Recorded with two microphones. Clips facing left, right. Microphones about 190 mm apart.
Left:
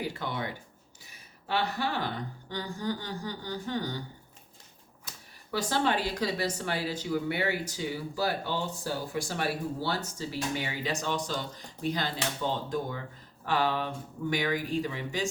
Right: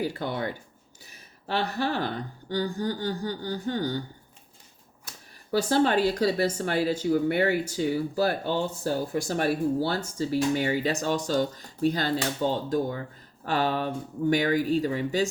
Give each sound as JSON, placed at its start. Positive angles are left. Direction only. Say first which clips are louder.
{"t": 0.2, "sound": "speech", "louder": "right 4 dB", "side_deg": -45}
{"t": 2.5, "sound": "a sound", "louder": "right 6 dB", "side_deg": -35}
{"t": 5.5, "sound": "speech", "louder": "right 6 dB", "side_deg": -40}